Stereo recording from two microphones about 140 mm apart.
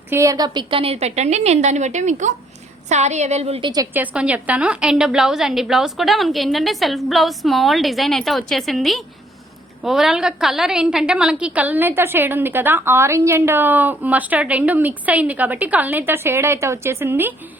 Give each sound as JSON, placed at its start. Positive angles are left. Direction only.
{"t": 0.1, "sound": "a woman's voice", "side_deg": -20}
{"t": 3.9, "sound": "a woman's voice", "side_deg": -10}